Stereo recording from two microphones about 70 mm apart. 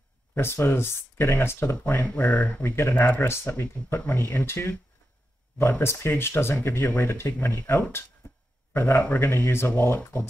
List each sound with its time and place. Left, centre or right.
0.3 s speech: left
2.6 s speech: left
8.2 s a sound: left
8.7 s a man's voice: left